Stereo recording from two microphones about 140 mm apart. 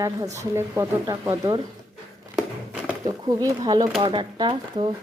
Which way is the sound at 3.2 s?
25° right (ahead or behind).